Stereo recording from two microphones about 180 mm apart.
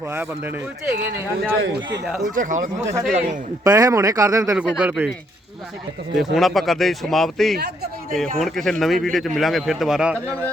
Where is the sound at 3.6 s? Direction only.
20° right (ahead or behind).